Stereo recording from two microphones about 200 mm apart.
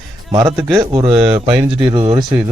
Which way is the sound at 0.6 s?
Centre (ahead or behind).